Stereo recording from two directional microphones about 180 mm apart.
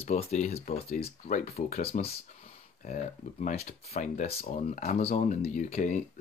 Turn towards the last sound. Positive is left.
turn(degrees=45)  # may be behind; listen again after turning